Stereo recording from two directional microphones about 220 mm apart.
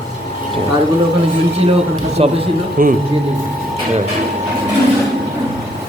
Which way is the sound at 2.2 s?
30° right (ahead or behind).